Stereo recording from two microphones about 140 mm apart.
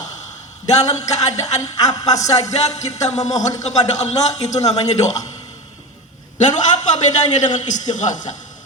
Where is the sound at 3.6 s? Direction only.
55° left (ahead or behind).